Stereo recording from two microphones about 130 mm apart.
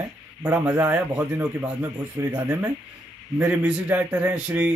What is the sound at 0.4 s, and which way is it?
Speech, 15° right (ahead or behind).